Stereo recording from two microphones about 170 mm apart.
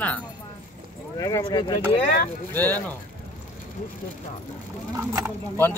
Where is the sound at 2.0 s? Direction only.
50° left (ahead or behind).